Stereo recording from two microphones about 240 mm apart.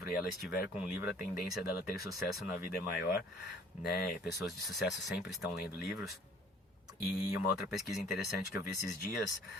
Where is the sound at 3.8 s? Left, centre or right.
Left.